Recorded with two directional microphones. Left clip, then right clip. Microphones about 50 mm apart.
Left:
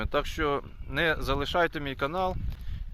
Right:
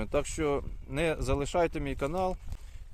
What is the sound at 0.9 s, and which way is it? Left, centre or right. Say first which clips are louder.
Speech: left 3 dB; centre.